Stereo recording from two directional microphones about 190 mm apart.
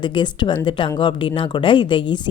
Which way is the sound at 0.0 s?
25° left (ahead or behind).